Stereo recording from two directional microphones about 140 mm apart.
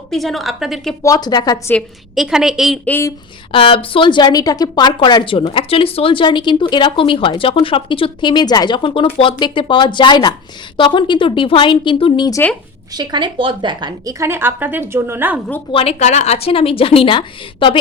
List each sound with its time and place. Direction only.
0.1 s a woman's voice: centre (ahead or behind)
1.0 s speech: 30° left (ahead or behind)
2.1 s a woman's voice: 5° right (ahead or behind)
2.8 s speech: 15° left (ahead or behind)
3.5 s a woman's voice: 40° left (ahead or behind)
12.9 s a woman's voice: 30° right (ahead or behind)
15.7 s a woman's voice: 45° left (ahead or behind)